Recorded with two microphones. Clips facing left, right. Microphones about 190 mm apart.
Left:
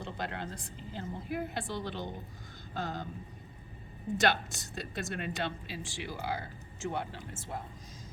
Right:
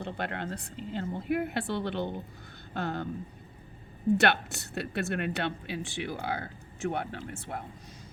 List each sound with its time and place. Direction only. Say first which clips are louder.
0.0 s speech: right 4 dB; 60° right (ahead or behind)
4.2 s speech: right 3 dB; 65° right (ahead or behind)